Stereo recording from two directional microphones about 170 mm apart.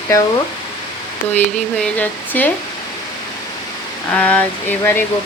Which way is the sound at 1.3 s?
10° left (ahead or behind).